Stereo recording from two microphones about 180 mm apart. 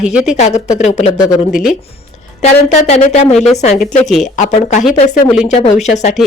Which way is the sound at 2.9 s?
40° left (ahead or behind).